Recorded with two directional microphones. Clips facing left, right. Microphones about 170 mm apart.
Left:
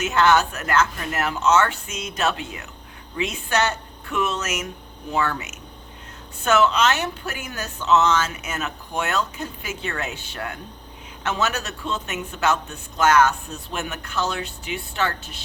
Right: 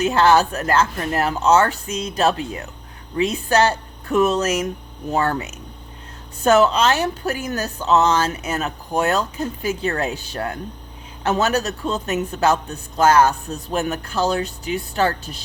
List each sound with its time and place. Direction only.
0.0 s speech: 30° right (ahead or behind)